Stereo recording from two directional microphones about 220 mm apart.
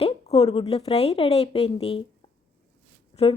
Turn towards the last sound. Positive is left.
turn(degrees=30)  # may be behind; listen again after turning